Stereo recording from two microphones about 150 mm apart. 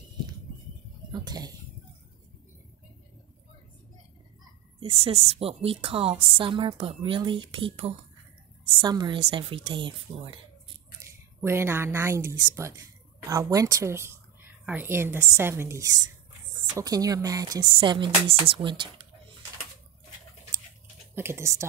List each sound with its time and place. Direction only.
1.2 s speech: 25° right (ahead or behind)
4.7 s a woman's voice: 40° right (ahead or behind)
11.0 s a woman's voice: 15° right (ahead or behind); by 18.9 s 35° right (ahead or behind)
21.1 s speech: 15° right (ahead or behind)